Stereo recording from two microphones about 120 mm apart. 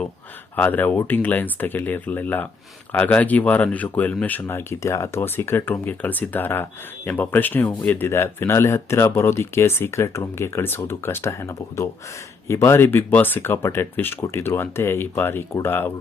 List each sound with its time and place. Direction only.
0.5 s speech: 15° left (ahead or behind)